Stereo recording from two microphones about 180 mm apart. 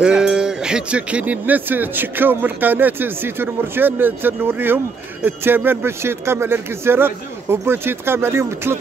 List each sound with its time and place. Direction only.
0.0 s speech: 5° right (ahead or behind)